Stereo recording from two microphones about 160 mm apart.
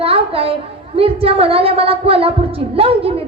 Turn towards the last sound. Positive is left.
turn(degrees=-35)  # may be behind; listen again after turning